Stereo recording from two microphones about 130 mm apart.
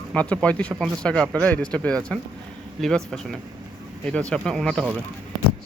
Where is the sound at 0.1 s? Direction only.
10° left (ahead or behind).